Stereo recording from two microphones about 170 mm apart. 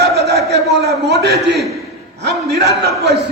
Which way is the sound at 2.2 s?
70° right (ahead or behind).